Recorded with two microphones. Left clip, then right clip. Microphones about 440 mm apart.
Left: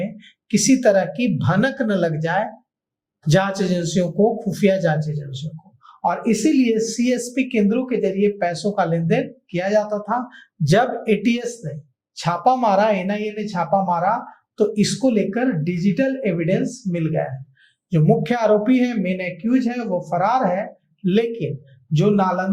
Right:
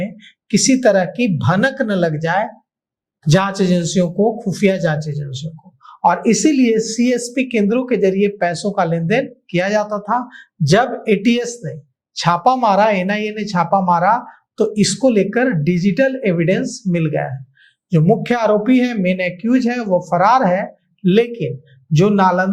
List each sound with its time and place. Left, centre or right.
0.0 s speech: right